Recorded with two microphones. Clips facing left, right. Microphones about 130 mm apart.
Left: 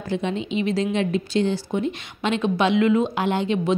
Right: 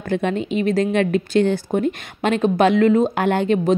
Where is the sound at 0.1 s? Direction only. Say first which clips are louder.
Right 4 dB; 55° right (ahead or behind).